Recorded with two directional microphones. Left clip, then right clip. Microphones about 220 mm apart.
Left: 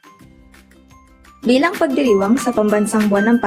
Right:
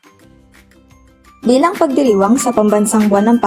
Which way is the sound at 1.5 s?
25° right (ahead or behind).